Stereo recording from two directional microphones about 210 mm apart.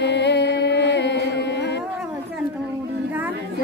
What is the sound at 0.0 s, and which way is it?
Music, 55° left (ahead or behind).